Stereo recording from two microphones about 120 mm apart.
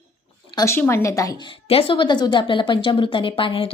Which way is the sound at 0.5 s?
25° left (ahead or behind).